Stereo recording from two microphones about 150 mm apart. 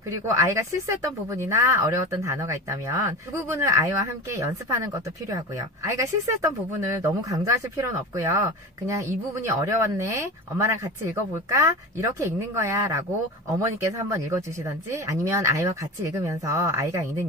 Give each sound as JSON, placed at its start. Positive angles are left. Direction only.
{"t": 0.3, "sound": "speech", "side_deg": -20}